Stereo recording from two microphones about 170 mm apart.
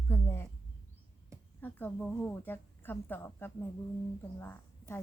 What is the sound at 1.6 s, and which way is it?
A woman's voice, 10° left (ahead or behind).